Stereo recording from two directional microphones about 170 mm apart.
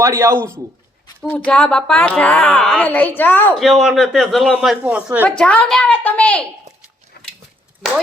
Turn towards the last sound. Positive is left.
turn(degrees=0)  # may be behind; listen again after turning